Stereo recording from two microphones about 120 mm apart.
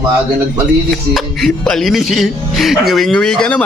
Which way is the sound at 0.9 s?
5° left (ahead or behind).